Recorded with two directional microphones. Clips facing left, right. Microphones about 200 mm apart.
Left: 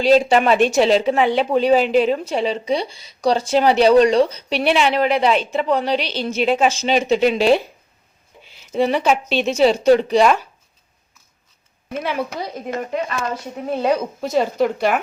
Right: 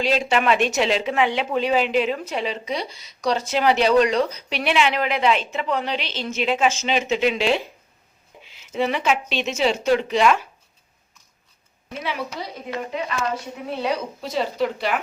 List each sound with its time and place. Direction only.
0.0 s speech: 35° left (ahead or behind)
8.7 s speech: 35° left (ahead or behind)
11.9 s a woman's voice: 50° left (ahead or behind)